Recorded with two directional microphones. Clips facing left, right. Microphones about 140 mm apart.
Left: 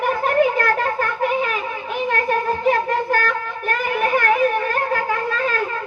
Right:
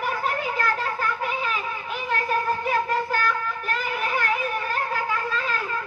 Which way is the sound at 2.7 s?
50° left (ahead or behind).